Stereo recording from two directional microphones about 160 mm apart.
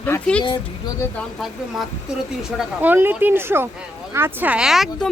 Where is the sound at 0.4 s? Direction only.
30° left (ahead or behind).